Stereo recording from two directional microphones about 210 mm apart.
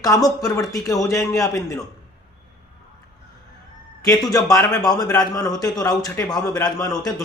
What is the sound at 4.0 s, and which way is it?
A man's voice, 15° left (ahead or behind).